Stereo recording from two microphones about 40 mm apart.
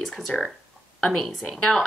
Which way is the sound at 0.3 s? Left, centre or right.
Left.